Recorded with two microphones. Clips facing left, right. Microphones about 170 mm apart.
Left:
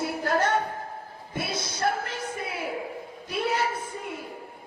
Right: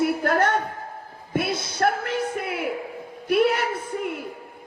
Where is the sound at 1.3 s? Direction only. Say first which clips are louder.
Right 7 dB; 60° right (ahead or behind).